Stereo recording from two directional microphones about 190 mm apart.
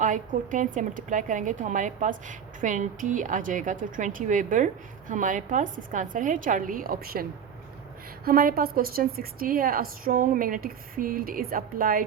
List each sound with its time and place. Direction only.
0.0 s a woman's voice: 40° right (ahead or behind)